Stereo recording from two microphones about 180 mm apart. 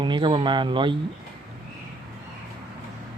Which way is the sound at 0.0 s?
25° right (ahead or behind).